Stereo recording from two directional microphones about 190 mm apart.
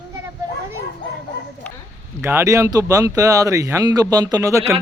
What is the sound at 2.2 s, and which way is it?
Speech, 15° right (ahead or behind).